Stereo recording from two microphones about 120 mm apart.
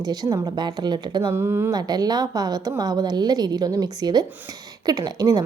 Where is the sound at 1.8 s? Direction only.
35° right (ahead or behind).